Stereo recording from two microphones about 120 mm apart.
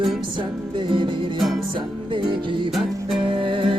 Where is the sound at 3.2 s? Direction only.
45° right (ahead or behind).